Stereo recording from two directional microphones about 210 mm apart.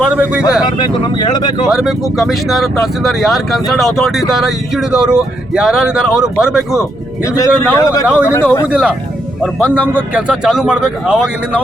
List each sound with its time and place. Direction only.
0.0 s speech: 5° right (ahead or behind)
1.3 s speech: 20° left (ahead or behind)
1.7 s speech: centre (ahead or behind)
7.3 s a man's voice: 15° left (ahead or behind)
8.0 s speech: 5° right (ahead or behind)